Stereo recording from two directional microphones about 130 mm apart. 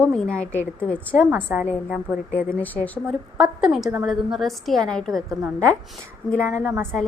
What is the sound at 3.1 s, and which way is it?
A woman's voice, 5° right (ahead or behind).